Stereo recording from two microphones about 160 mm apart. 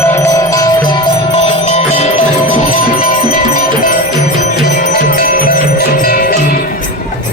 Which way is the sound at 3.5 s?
60° left (ahead or behind).